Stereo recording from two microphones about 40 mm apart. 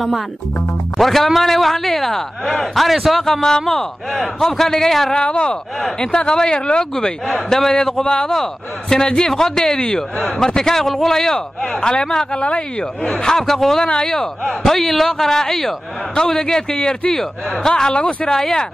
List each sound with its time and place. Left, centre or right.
0.9 s a man's voice: centre
5.1 s a man's voice: left
12.4 s speech: left
13.3 s a man's voice: centre
17.9 s speech: left
18.3 s a man's voice: centre